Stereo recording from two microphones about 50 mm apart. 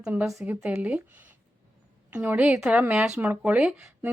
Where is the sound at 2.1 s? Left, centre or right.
Right.